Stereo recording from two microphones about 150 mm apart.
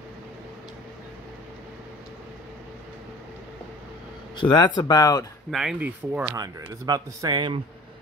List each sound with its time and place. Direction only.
4.4 s speech: 30° left (ahead or behind)
5.5 s speech: 5° right (ahead or behind)
6.3 s a man's voice: 25° right (ahead or behind)